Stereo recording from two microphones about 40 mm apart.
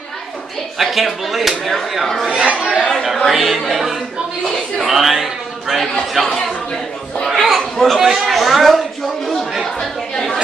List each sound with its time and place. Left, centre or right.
0.7 s speech: centre
2.5 s speech: centre
3.3 s a man's voice: centre
6.2 s speech: centre
7.2 s speech: centre
9.8 s chatter: centre